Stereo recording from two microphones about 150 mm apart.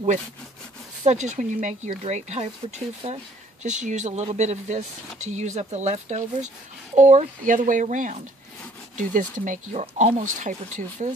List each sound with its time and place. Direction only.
1.0 s speech: 50° right (ahead or behind)